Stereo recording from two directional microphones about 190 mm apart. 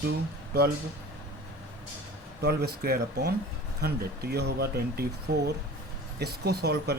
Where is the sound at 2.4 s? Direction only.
55° right (ahead or behind).